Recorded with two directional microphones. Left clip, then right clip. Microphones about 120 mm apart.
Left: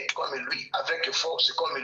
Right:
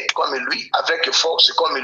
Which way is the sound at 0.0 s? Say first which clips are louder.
Right 10 dB; 45° right (ahead or behind).